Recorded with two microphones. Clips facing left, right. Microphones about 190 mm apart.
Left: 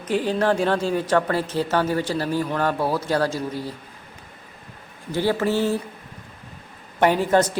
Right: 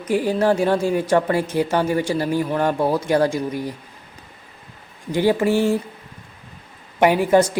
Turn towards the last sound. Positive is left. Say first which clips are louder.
# right 3 dB
turn(degrees=-10)  # may be behind; listen again after turning